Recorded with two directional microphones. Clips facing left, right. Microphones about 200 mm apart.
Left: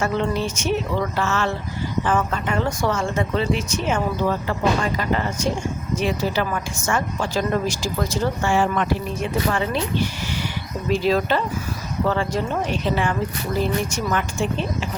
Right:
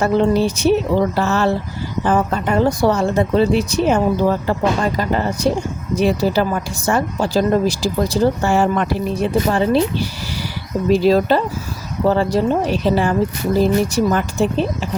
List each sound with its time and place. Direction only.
0.0 s speech: 35° right (ahead or behind)